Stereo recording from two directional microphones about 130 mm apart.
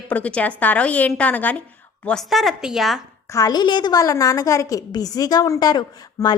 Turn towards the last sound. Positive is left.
turn(degrees=30)  # may be behind; listen again after turning